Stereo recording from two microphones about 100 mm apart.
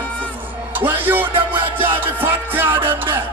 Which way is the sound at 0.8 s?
20° right (ahead or behind).